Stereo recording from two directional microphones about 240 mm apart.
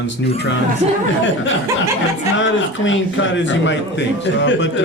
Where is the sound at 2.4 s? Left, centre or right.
Left.